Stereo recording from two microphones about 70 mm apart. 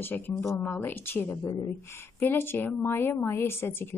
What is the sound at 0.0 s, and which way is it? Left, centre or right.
A woman's voice, left.